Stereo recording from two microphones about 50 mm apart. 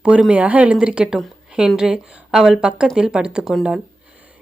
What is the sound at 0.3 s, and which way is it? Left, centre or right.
A woman's voice, right.